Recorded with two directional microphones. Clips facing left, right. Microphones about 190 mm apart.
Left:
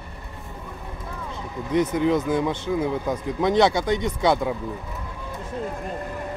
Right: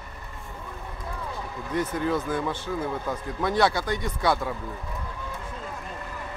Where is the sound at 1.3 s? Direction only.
20° left (ahead or behind).